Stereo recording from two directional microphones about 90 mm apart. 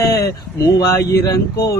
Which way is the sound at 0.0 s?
40° left (ahead or behind).